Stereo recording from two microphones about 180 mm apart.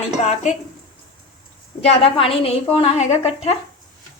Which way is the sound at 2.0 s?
30° left (ahead or behind).